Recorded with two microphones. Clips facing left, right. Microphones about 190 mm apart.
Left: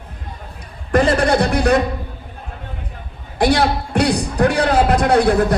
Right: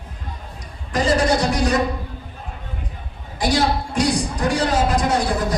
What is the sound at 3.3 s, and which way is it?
A man's voice, 60° left (ahead or behind).